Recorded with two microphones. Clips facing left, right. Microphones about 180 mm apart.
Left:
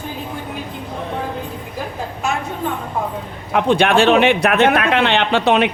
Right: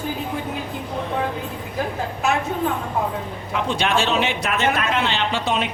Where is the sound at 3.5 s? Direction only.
60° left (ahead or behind).